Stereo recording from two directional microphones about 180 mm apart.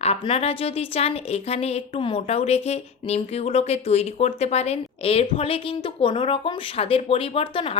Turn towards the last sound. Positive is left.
turn(degrees=30)  # may be behind; listen again after turning